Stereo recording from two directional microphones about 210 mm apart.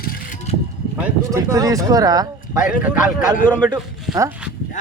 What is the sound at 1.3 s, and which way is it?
Speech, 15° right (ahead or behind).